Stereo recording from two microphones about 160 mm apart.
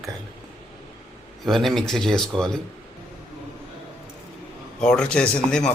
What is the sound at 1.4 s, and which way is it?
Speech, centre (ahead or behind).